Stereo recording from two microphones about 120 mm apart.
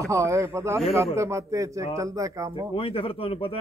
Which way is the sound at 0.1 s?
25° right (ahead or behind).